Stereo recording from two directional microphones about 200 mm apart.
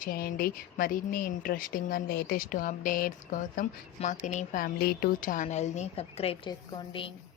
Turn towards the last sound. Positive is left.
turn(degrees=25)  # may be behind; listen again after turning